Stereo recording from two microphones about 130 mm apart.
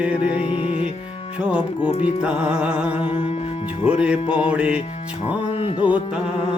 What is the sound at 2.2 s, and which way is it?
Music, 10° right (ahead or behind).